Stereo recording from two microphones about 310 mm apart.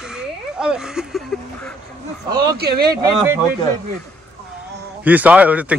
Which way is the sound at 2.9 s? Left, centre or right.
Centre.